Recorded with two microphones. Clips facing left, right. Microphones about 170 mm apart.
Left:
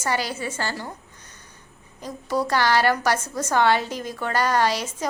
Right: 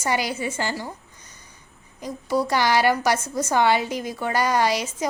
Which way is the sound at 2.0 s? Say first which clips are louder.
Right 2 dB; 10° right (ahead or behind).